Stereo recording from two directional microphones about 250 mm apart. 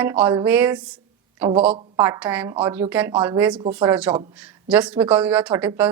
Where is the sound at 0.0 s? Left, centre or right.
Centre.